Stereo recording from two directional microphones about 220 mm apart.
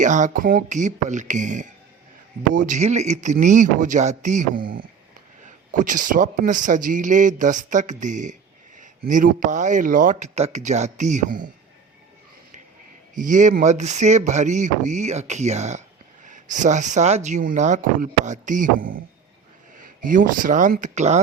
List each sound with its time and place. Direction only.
0.0 s speech: 35° right (ahead or behind)
5.7 s speech: 35° right (ahead or behind)
13.1 s speech: 35° right (ahead or behind)